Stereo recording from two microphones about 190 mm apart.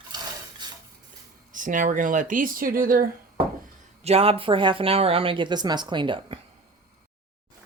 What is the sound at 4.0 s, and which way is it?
Speech, 30° right (ahead or behind).